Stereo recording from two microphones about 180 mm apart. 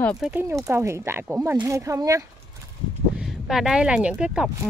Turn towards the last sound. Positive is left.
turn(degrees=-5)  # may be behind; listen again after turning